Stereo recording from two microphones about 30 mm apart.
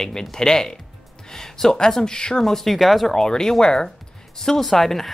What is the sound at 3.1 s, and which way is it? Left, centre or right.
Speech, centre.